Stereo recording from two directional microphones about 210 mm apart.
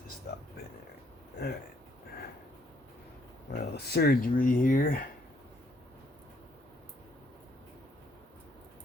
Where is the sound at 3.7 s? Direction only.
50° left (ahead or behind).